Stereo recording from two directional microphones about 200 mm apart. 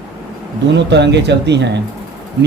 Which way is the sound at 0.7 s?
60° right (ahead or behind).